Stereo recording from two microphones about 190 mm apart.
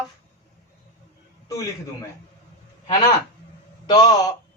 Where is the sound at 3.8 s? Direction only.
20° left (ahead or behind).